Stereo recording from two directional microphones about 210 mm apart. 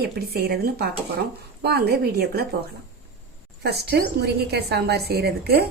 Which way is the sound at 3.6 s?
50° right (ahead or behind).